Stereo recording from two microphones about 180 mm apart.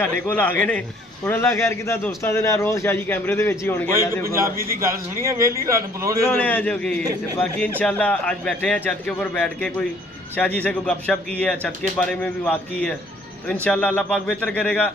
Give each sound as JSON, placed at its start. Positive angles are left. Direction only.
{"t": 0.0, "sound": "a man's voice", "side_deg": 10}
{"t": 5.2, "sound": "speech", "side_deg": -15}
{"t": 6.2, "sound": "a man's voice", "side_deg": 10}